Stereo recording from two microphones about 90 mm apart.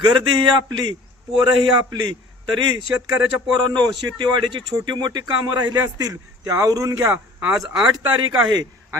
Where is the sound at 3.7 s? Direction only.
55° right (ahead or behind); by 7.1 s 35° right (ahead or behind).